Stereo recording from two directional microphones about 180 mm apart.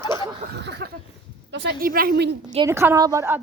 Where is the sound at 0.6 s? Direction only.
70° right (ahead or behind).